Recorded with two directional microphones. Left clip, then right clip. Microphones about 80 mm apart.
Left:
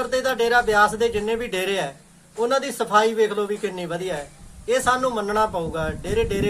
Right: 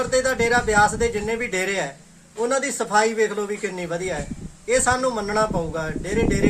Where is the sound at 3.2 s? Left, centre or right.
Centre.